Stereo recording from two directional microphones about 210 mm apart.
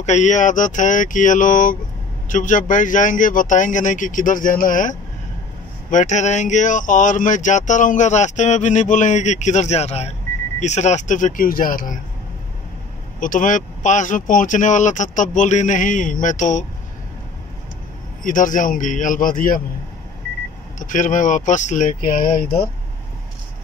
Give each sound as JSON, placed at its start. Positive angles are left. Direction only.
{"t": 0.0, "sound": "speech", "side_deg": 35}
{"t": 13.2, "sound": "speech", "side_deg": 40}
{"t": 18.2, "sound": "speech", "side_deg": 40}
{"t": 20.8, "sound": "speech", "side_deg": 40}